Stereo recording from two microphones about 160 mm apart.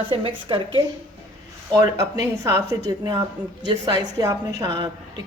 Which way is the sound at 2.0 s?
20° right (ahead or behind).